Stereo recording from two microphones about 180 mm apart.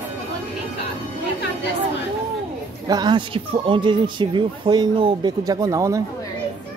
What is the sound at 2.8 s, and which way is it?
Speech, 20° right (ahead or behind).